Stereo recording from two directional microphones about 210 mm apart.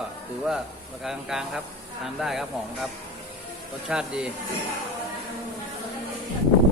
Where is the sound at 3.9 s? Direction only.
5° right (ahead or behind).